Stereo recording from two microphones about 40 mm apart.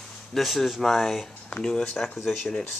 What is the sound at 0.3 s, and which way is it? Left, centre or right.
Speech, centre.